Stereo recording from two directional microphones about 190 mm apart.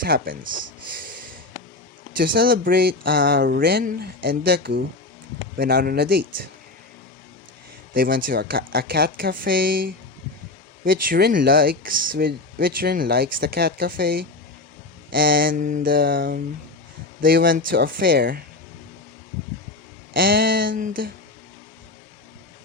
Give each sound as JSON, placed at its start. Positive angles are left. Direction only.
{"t": 0.0, "sound": "speech", "side_deg": -50}
{"t": 2.1, "sound": "speech", "side_deg": -50}
{"t": 7.9, "sound": "speech", "side_deg": -50}
{"t": 20.1, "sound": "speech", "side_deg": -50}